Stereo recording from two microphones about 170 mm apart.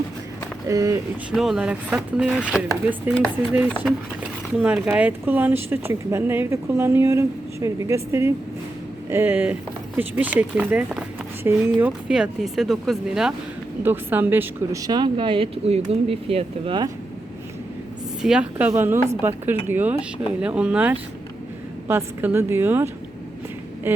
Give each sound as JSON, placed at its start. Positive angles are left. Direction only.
{"t": 0.7, "sound": "speech", "side_deg": -20}
{"t": 1.3, "sound": "speech", "side_deg": -5}
{"t": 4.5, "sound": "speech", "side_deg": -5}
{"t": 18.2, "sound": "speech", "side_deg": -5}